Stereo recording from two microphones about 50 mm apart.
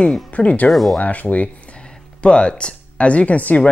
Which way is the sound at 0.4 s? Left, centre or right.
Left.